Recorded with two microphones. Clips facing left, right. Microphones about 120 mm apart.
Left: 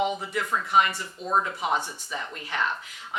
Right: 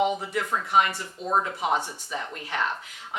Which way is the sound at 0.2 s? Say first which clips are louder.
Even; 40° right (ahead or behind).